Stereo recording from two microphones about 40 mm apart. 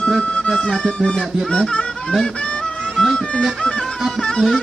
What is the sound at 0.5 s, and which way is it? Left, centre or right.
Speech, centre.